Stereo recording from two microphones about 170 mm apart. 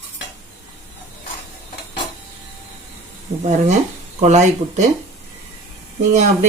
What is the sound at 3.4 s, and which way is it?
A woman's voice, 45° right (ahead or behind).